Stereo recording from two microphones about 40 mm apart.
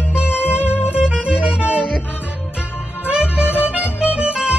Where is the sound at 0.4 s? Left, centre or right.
Left.